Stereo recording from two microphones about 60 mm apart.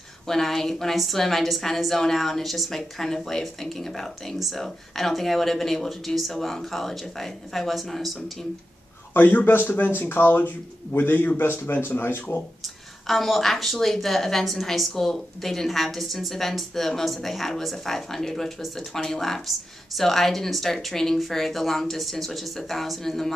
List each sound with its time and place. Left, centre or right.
0.3 s a woman's voice: centre
9.1 s speech: left
12.6 s a woman's voice: centre